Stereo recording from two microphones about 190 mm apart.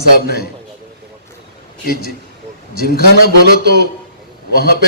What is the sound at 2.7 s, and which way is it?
A man's voice, 55° left (ahead or behind).